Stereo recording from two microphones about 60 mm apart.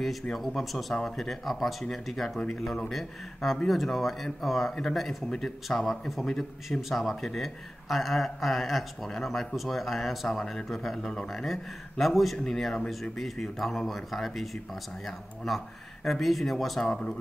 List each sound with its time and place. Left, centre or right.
0.0 s speech: centre
12.7 s speech: centre
13.2 s speech: centre
16.8 s speech: centre